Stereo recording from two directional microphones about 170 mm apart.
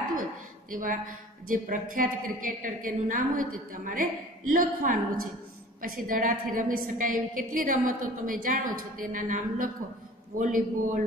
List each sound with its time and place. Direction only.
0.7 s a woman's voice: 50° right (ahead or behind)